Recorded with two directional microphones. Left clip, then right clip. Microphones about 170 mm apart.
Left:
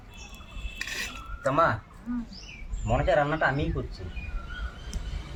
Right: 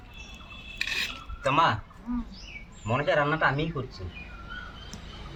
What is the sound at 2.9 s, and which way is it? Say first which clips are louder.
Speech: left 1 dB; 25° right (ahead or behind).